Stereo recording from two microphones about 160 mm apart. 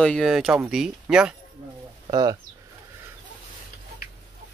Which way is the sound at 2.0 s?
25° right (ahead or behind).